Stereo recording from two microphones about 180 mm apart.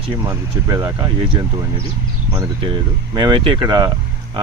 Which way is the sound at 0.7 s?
15° right (ahead or behind).